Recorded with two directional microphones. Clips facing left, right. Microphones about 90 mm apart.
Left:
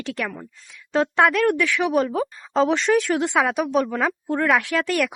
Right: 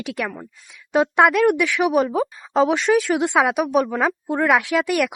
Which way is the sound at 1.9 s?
5° right (ahead or behind).